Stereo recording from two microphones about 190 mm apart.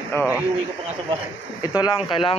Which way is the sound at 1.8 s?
25° left (ahead or behind).